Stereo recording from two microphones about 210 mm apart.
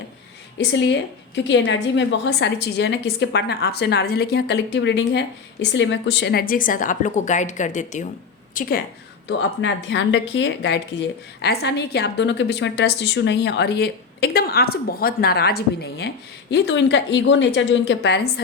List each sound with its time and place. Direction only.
0.7 s a woman's voice: 55° left (ahead or behind); by 8.7 s 40° left (ahead or behind)
9.6 s a woman's voice: 60° left (ahead or behind)